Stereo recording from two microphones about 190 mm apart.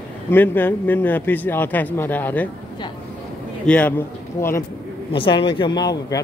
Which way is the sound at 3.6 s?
5° left (ahead or behind).